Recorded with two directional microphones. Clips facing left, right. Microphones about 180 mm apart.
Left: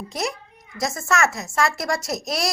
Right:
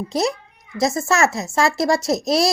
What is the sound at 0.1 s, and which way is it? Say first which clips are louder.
A child's voice: right 6 dB; 30° right (ahead or behind).